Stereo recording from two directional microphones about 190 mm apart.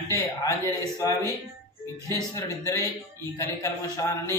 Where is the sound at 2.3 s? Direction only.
15° left (ahead or behind).